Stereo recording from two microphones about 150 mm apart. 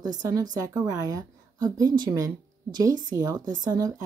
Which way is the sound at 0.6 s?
25° right (ahead or behind).